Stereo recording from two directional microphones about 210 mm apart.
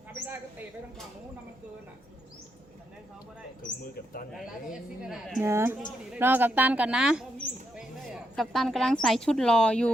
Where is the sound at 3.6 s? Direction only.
45° left (ahead or behind).